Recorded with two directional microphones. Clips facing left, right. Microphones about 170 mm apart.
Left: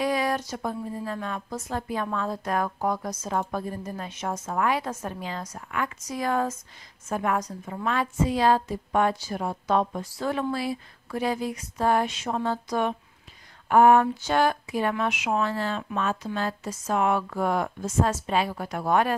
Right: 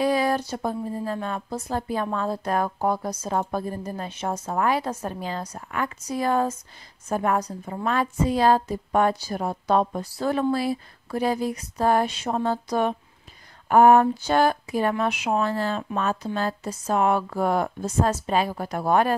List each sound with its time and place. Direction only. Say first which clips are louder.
0.0 s speech: right 3 dB; 30° right (ahead or behind)